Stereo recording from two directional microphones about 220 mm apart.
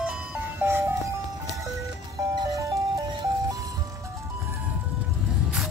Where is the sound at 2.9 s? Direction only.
15° right (ahead or behind).